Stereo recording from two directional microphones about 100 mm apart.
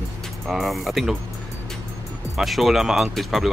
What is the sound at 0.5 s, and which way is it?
Speech, centre (ahead or behind).